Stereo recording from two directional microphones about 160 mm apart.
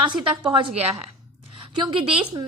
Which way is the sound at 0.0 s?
30° right (ahead or behind).